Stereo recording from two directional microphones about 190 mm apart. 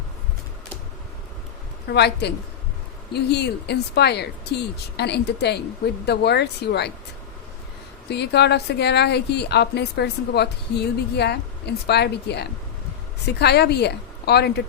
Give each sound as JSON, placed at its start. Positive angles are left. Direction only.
{"t": 1.9, "sound": "a woman's voice", "side_deg": 60}
{"t": 8.1, "sound": "a woman's voice", "side_deg": 60}